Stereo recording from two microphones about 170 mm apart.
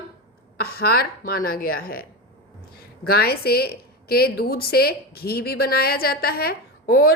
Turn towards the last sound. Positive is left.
turn(degrees=65)  # may be behind; listen again after turning